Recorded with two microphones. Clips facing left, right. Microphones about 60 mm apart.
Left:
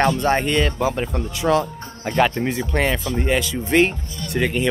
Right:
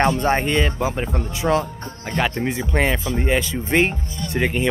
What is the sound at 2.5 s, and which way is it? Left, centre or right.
Speech, centre.